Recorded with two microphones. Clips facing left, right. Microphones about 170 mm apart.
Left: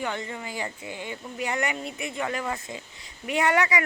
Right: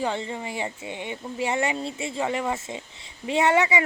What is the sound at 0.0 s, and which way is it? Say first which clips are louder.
Speech: right 4 dB; 25° right (ahead or behind).